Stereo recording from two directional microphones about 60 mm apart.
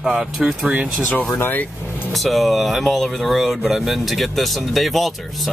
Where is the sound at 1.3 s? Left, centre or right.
Left.